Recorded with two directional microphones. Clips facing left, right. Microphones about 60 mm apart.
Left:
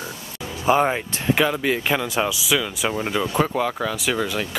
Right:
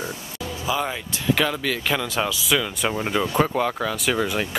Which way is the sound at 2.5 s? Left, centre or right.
Centre.